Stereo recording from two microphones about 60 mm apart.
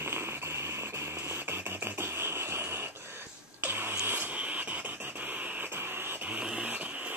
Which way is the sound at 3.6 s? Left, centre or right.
Right.